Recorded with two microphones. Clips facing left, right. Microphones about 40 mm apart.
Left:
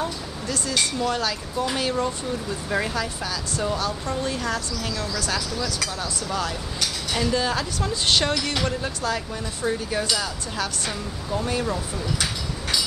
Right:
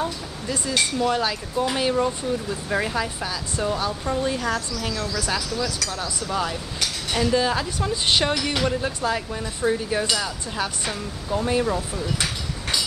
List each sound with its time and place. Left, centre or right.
0.5 s speech: centre